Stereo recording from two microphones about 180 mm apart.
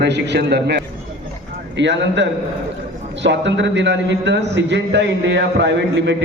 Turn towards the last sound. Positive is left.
turn(degrees=-75)  # may be behind; listen again after turning